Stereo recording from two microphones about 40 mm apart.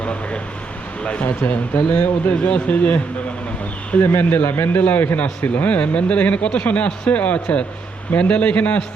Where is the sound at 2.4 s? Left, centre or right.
Left.